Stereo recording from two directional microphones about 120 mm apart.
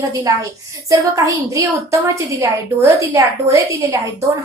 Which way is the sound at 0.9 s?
30° right (ahead or behind).